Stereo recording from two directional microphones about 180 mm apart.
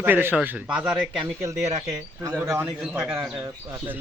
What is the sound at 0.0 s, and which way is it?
A man's voice, 10° right (ahead or behind).